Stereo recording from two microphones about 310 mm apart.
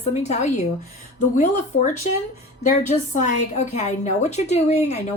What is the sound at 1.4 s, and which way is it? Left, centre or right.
Speech, left.